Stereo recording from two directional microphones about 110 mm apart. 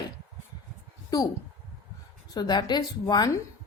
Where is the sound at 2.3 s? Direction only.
40° left (ahead or behind).